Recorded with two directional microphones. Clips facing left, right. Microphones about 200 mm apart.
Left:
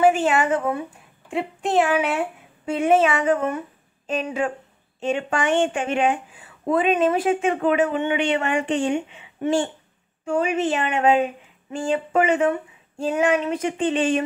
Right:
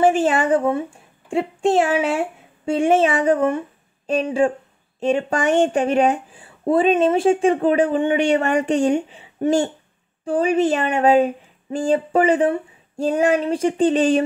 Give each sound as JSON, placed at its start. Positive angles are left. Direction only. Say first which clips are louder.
{"t": 0.1, "sound": "a woman's voice", "louder": "right 3 dB", "side_deg": -35}